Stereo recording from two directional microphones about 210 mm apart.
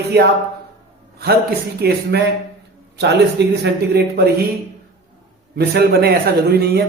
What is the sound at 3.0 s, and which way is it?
Speech, 55° right (ahead or behind).